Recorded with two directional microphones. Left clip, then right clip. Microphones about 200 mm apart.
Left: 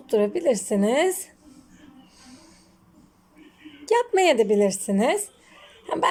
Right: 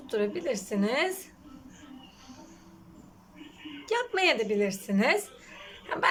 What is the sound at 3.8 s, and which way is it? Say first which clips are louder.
A woman's voice: left 7 dB; 30° left (ahead or behind).